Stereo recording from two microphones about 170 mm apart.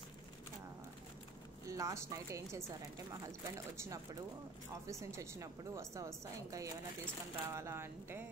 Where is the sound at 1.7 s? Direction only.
20° right (ahead or behind).